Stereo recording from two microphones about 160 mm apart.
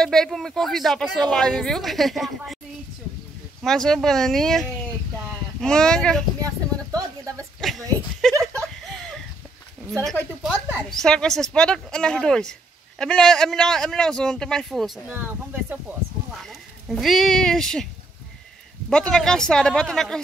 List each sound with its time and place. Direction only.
0.0 s a woman's voice: 5° left (ahead or behind)
3.6 s a woman's voice: 5° left (ahead or behind)
6.4 s a sound: 20° right (ahead or behind)
10.4 s a woman's voice: centre (ahead or behind)
16.4 s speech: centre (ahead or behind)
18.9 s a woman's voice: 5° left (ahead or behind)